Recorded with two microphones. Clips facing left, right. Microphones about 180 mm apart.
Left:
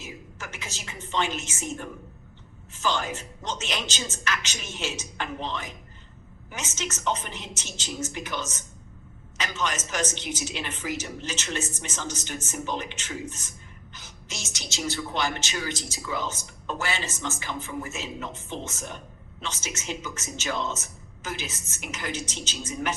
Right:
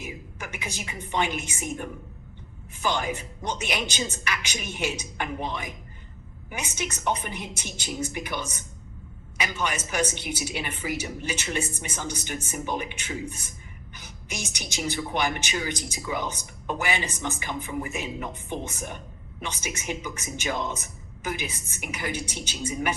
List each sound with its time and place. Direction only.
0.0 s speech: 15° right (ahead or behind)